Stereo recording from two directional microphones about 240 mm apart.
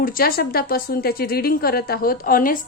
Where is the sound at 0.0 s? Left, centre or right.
Left.